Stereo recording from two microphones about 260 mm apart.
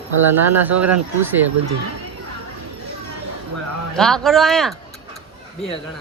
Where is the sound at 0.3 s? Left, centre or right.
Right.